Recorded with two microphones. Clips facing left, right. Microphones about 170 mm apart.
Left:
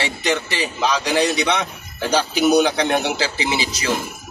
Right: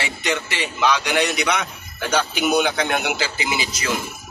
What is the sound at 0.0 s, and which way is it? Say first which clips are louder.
Speech: left 3 dB; 35° left (ahead or behind).